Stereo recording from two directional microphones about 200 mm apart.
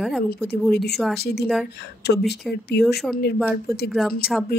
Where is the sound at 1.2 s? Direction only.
55° left (ahead or behind).